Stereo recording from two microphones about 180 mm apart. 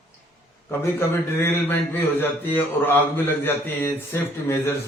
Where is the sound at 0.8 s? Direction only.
15° left (ahead or behind).